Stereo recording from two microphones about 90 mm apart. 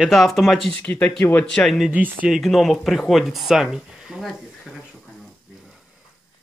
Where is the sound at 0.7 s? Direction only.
15° left (ahead or behind).